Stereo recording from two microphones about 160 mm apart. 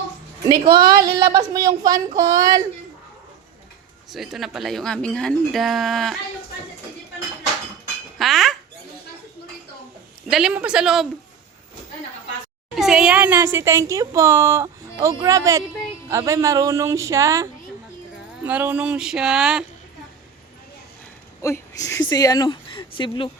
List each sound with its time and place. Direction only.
0.8 s speech: 25° right (ahead or behind)
4.1 s speech: centre (ahead or behind)
8.2 s dishes: centre (ahead or behind)
10.2 s speech: 5° right (ahead or behind)
12.7 s speech: 5° right (ahead or behind)
21.4 s speech: 20° left (ahead or behind)